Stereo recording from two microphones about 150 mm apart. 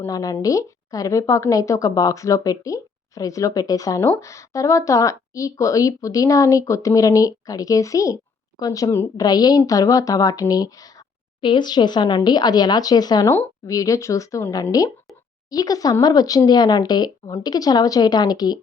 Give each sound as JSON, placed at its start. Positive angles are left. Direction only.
{"t": 0.0, "sound": "a woman's voice", "side_deg": 25}